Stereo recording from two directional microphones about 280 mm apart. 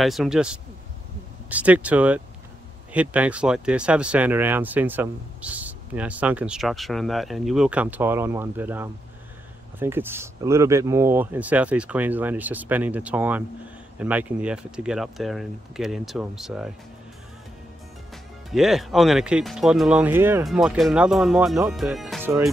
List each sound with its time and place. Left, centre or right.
0.0 s speech: centre
18.1 s speech: centre